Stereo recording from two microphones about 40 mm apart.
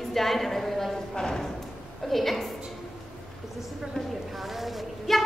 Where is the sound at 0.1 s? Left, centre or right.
Centre.